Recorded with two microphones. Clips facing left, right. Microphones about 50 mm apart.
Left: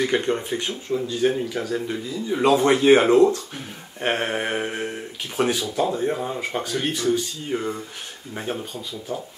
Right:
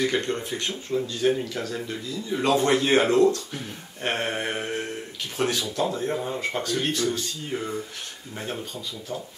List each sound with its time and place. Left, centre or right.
0.0 s speech: centre